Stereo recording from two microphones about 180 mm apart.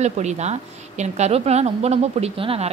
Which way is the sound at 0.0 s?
40° right (ahead or behind).